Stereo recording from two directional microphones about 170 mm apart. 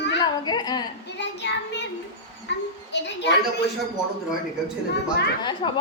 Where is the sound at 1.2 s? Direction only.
90° left.